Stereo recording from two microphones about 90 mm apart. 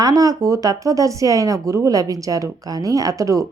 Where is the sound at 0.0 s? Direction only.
40° right (ahead or behind).